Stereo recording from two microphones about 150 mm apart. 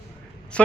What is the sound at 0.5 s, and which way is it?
Speech, 5° left (ahead or behind).